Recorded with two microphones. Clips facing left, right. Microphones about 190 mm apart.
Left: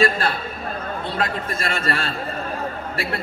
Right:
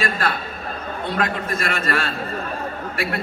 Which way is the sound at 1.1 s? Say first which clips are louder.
Right 3 dB; 30° left (ahead or behind).